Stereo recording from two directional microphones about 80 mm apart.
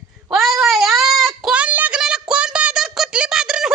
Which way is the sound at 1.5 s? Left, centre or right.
Centre.